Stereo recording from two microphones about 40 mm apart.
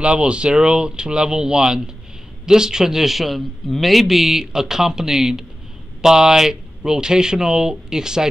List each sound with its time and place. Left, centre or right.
0.0 s a man's voice: right